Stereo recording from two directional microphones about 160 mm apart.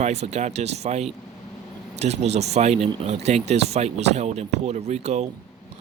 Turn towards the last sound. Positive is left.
turn(degrees=-40)  # may be behind; listen again after turning